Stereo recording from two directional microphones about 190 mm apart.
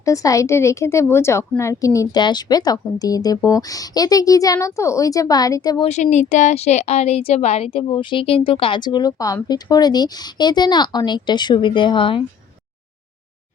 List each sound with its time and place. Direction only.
0.0 s a woman's voice: 15° left (ahead or behind)
5.9 s a woman's voice: 40° left (ahead or behind)